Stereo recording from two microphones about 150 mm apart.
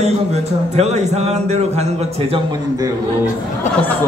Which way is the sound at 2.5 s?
25° right (ahead or behind).